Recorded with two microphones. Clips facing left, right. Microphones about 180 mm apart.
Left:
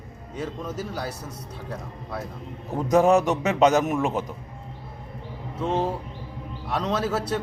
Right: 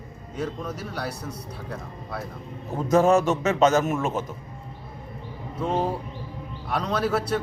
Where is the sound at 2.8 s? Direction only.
15° left (ahead or behind).